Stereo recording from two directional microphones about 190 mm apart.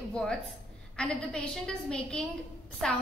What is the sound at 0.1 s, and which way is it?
A woman's voice, 5° left (ahead or behind).